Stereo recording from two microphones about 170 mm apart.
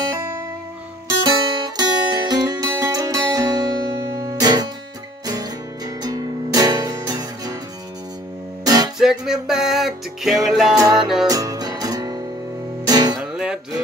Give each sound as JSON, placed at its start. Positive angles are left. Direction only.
{"t": 1.8, "sound": "music", "side_deg": -25}
{"t": 8.6, "sound": "music", "side_deg": -25}
{"t": 8.9, "sound": "music", "side_deg": -5}
{"t": 10.8, "sound": "music", "side_deg": -25}
{"t": 13.2, "sound": "music", "side_deg": -5}